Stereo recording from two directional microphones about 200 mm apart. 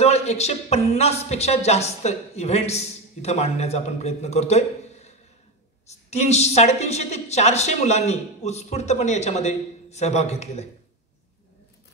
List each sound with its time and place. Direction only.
0.0 s speech: 30° left (ahead or behind)